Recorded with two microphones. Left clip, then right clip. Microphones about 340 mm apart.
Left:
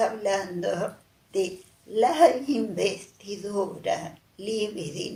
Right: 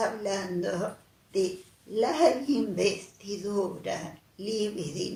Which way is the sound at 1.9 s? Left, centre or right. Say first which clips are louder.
Left 5 dB; left.